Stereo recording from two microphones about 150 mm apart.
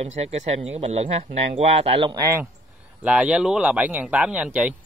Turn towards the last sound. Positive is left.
turn(degrees=-10)  # may be behind; listen again after turning